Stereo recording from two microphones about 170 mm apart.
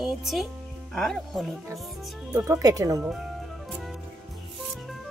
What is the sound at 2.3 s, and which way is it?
Speech, 20° right (ahead or behind).